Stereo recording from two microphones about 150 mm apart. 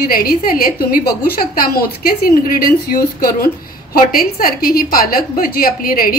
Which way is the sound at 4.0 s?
75° left (ahead or behind).